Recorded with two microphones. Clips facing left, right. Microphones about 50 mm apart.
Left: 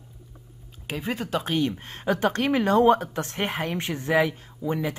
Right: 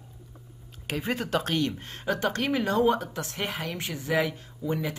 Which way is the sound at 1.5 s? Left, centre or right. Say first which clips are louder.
Left 2 dB; left.